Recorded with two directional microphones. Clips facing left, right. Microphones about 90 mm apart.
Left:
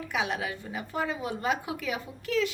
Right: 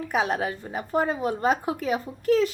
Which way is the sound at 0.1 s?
40° right (ahead or behind).